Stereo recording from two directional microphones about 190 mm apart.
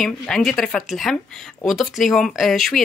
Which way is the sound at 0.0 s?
Centre (ahead or behind).